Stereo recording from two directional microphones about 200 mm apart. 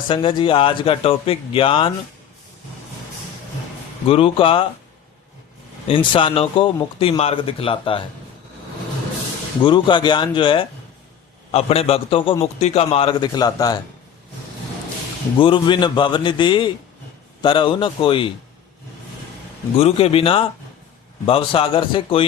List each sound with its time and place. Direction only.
0.1 s a man's voice: 25° left (ahead or behind)
4.0 s a man's voice: 30° left (ahead or behind)
5.9 s a man's voice: 25° left (ahead or behind)
9.6 s a man's voice: 25° left (ahead or behind)
15.4 s a man's voice: 25° left (ahead or behind)
19.8 s a man's voice: 30° left (ahead or behind)